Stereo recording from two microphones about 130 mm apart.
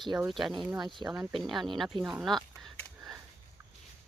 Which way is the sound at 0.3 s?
Centre (ahead or behind).